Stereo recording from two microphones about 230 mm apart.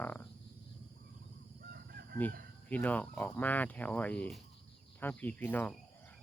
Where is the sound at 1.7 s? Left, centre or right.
Right.